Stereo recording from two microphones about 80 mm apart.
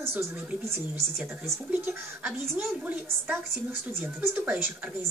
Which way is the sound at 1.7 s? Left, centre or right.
Centre.